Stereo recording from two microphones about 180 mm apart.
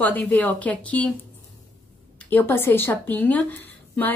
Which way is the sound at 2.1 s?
10° left (ahead or behind).